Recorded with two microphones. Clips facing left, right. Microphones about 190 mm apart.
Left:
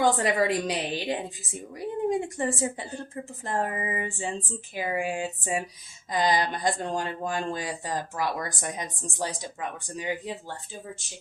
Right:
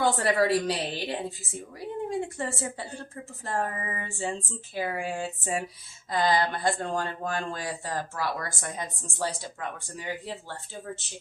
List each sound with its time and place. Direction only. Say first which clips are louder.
0.0 s speech: left 1 dB; 15° left (ahead or behind)